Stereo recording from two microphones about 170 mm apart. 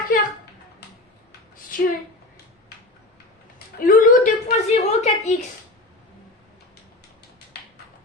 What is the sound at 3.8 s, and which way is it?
A woman's voice, 55° left (ahead or behind).